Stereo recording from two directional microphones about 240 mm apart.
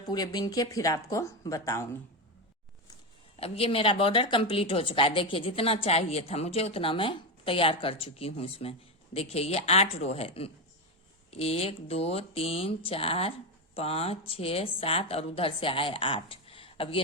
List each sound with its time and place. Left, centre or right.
0.1 s speech: centre
3.3 s a woman's voice: left